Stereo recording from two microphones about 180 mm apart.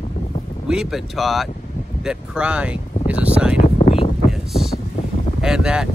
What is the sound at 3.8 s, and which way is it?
Wind noise, 30° left (ahead or behind).